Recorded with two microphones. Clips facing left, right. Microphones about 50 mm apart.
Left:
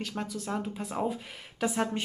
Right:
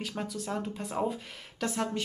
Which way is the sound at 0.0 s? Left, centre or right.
Centre.